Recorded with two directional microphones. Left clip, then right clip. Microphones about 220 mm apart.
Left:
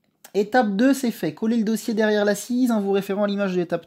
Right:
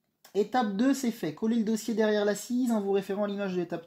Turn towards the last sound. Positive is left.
turn(degrees=45)  # may be behind; listen again after turning